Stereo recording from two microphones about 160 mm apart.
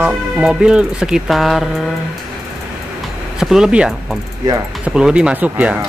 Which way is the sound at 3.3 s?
5° right (ahead or behind).